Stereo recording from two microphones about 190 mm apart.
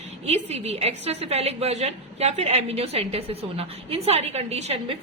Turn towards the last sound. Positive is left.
turn(degrees=-35)  # may be behind; listen again after turning